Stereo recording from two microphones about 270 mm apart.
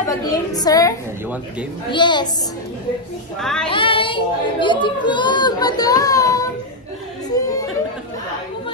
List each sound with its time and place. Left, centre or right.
0.2 s speech: centre
3.3 s speech: centre
3.7 s speech: centre